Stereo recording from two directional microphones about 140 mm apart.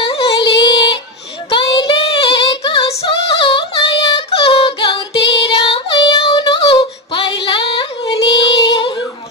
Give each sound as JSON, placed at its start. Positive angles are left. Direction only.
{"t": 0.0, "sound": "music", "side_deg": 40}
{"t": 1.5, "sound": "female singing", "side_deg": 35}
{"t": 6.6, "sound": "child singing", "side_deg": 35}